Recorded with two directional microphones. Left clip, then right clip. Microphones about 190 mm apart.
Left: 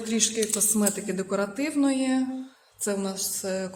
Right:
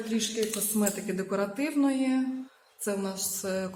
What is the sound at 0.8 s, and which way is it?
A woman's voice, 25° left (ahead or behind).